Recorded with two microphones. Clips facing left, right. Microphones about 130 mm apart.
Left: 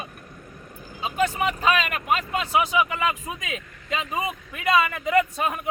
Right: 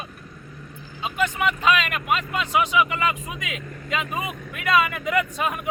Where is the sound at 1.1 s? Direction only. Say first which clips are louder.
Even; 40° left (ahead or behind).